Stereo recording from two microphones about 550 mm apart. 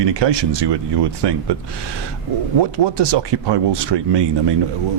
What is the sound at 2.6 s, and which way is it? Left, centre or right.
Speech, right.